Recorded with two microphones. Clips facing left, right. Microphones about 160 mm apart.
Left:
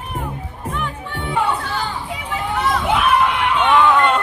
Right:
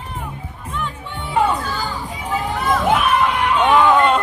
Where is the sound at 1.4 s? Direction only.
70° left (ahead or behind).